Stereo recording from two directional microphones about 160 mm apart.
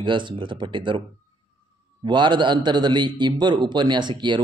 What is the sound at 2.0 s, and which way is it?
A man's voice, 30° right (ahead or behind).